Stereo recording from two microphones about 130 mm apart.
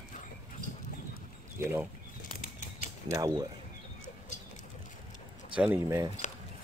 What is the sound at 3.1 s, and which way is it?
Speech, 25° right (ahead or behind).